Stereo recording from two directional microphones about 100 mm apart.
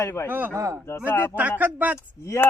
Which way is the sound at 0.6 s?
30° right (ahead or behind).